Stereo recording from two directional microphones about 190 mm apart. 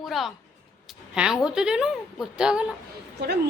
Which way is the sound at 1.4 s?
5° right (ahead or behind).